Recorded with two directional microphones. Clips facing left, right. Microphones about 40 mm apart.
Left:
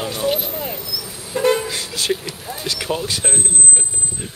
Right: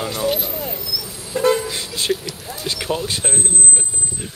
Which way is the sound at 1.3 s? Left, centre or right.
Left.